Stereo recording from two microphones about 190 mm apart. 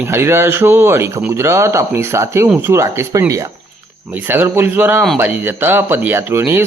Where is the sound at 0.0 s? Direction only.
15° right (ahead or behind).